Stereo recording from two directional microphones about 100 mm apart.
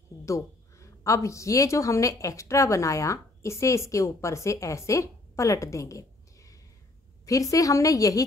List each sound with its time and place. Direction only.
0.2 s a woman's voice: 30° left (ahead or behind)